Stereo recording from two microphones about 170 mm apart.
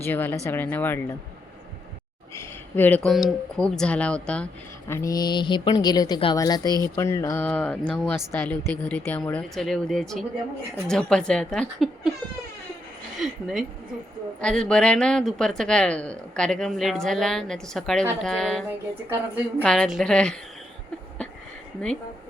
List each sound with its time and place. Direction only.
0.0 s speech: 10° left (ahead or behind)
2.3 s a sound: 15° left (ahead or behind)
3.1 s speech: centre (ahead or behind)
4.9 s speech: 20° left (ahead or behind); by 12.1 s centre (ahead or behind)
13.1 s a sound: centre (ahead or behind)
14.4 s speech: 5° left (ahead or behind)
18.7 s a woman's voice: 10° right (ahead or behind)
19.6 s speech: 5° left (ahead or behind)